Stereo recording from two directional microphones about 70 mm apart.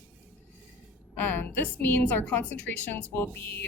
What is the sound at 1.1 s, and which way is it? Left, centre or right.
Speech, left.